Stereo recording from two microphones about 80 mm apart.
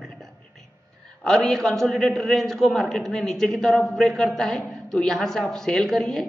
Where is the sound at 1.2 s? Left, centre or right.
Centre.